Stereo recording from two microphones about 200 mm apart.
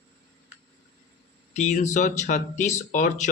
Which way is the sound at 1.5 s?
35° left (ahead or behind).